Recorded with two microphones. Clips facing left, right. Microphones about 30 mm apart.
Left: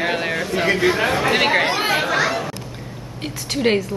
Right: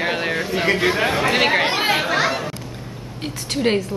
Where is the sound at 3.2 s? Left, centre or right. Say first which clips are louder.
Left 1 dB; centre.